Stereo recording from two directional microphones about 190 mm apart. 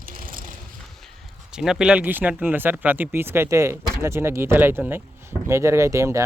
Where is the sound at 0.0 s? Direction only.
50° right (ahead or behind).